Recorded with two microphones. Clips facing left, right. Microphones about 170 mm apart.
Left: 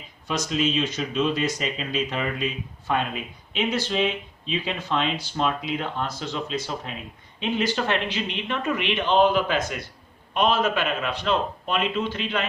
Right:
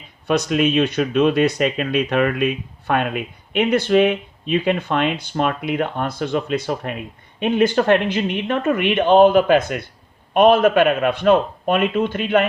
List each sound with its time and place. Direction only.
0.3 s speech: 60° right (ahead or behind)